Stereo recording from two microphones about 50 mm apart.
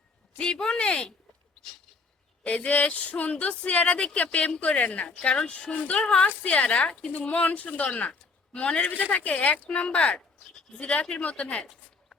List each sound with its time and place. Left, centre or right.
0.3 s speech: centre
2.4 s speech: left